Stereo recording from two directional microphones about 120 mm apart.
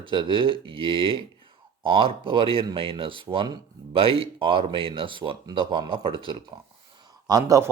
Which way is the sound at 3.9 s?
50° right (ahead or behind).